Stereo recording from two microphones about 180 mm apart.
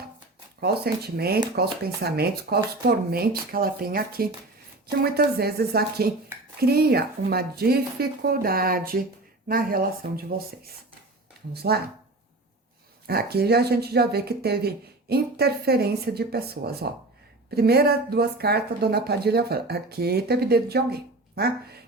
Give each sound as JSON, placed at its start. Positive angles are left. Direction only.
{"t": 0.6, "sound": "speech", "side_deg": -60}
{"t": 13.1, "sound": "speech", "side_deg": -60}